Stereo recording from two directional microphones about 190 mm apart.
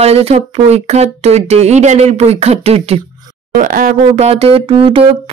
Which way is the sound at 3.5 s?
45° right (ahead or behind).